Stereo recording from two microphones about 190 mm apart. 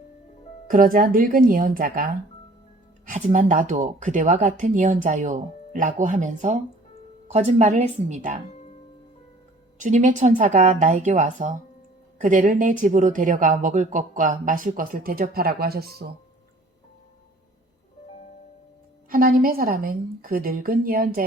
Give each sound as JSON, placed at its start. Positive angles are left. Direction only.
{"t": 0.7, "sound": "speech", "side_deg": -45}
{"t": 3.1, "sound": "speech", "side_deg": -45}
{"t": 8.4, "sound": "music", "side_deg": 35}
{"t": 9.7, "sound": "speech", "side_deg": -40}
{"t": 19.1, "sound": "speech", "side_deg": -50}